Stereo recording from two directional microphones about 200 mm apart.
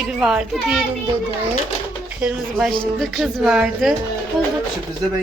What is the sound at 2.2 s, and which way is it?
Speech, 5° right (ahead or behind).